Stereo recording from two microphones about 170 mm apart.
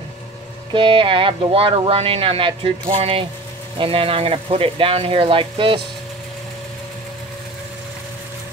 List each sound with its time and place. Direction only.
0.7 s speech: 30° right (ahead or behind)